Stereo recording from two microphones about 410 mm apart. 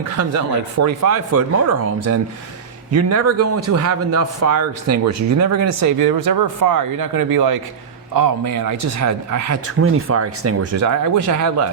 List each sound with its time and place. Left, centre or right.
0.2 s speech: right
2.9 s speech: right